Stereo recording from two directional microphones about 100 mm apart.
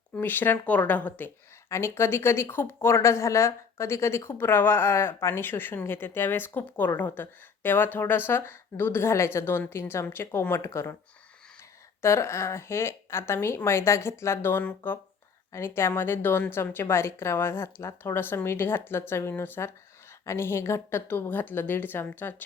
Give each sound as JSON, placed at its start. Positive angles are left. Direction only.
{"t": 0.2, "sound": "speech", "side_deg": 20}
{"t": 12.0, "sound": "speech", "side_deg": 25}